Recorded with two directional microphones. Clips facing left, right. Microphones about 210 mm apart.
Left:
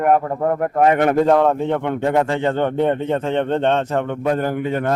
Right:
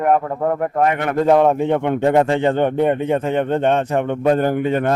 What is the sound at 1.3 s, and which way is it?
Speech, 15° right (ahead or behind).